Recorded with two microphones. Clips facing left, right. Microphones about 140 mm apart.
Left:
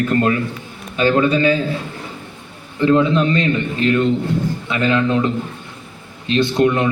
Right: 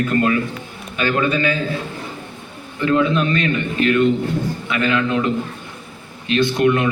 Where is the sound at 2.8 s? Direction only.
25° left (ahead or behind).